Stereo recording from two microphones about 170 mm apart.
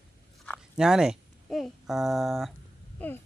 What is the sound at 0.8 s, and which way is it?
Speech, 5° right (ahead or behind).